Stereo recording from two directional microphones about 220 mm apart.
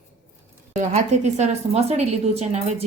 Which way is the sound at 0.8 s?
30° right (ahead or behind).